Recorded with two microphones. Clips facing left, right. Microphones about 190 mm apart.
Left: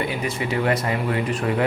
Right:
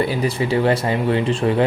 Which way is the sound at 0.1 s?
35° right (ahead or behind).